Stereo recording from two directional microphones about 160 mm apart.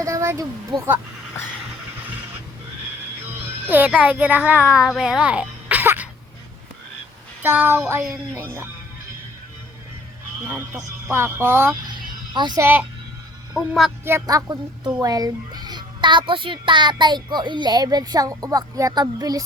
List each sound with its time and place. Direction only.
0.0 s speech: 20° right (ahead or behind)
3.4 s a child's voice: 10° right (ahead or behind)
7.4 s speech: 10° right (ahead or behind)
10.4 s speech: 15° right (ahead or behind)
11.9 s music: 25° right (ahead or behind)
14.0 s a child's voice: 20° right (ahead or behind)